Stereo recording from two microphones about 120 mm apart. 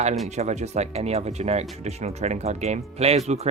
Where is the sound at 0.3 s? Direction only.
70° right (ahead or behind).